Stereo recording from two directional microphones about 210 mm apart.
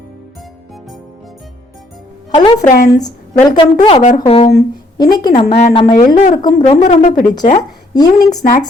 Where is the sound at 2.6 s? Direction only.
40° left (ahead or behind).